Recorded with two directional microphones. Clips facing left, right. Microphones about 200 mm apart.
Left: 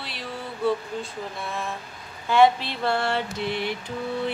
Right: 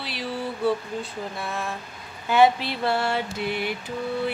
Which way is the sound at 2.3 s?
5° right (ahead or behind).